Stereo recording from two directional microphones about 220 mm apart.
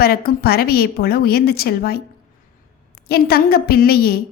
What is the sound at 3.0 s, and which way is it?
A woman's voice, 45° left (ahead or behind).